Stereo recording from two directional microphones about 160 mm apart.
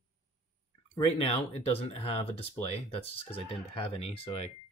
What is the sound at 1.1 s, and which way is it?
Speech, 40° left (ahead or behind).